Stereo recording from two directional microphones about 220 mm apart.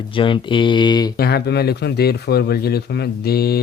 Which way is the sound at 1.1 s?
45° left (ahead or behind).